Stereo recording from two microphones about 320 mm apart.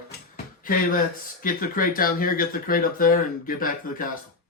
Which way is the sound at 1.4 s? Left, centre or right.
Left.